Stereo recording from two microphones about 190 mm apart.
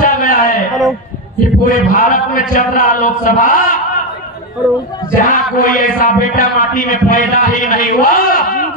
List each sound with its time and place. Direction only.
0.0 s a sound: 45° left (ahead or behind)
1.7 s speech: 45° left (ahead or behind)
5.1 s speech: 45° left (ahead or behind)